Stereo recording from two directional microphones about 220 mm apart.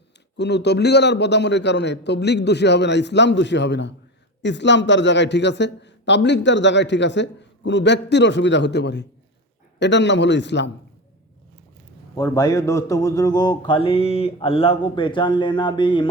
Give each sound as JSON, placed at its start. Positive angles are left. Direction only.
{"t": 0.3, "sound": "a man's voice", "side_deg": 50}
{"t": 12.1, "sound": "speech", "side_deg": 15}